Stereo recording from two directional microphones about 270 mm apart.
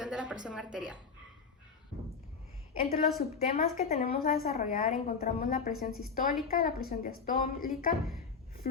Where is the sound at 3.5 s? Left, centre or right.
Left.